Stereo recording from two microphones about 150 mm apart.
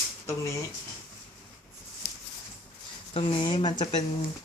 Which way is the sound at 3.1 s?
35° left (ahead or behind).